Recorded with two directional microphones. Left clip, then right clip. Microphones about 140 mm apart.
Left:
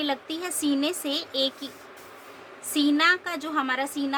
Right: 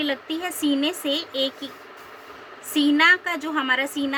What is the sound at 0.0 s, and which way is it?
Speech, 35° left (ahead or behind).